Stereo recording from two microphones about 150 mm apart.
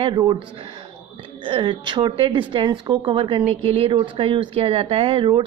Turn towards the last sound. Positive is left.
turn(degrees=-35)  # may be behind; listen again after turning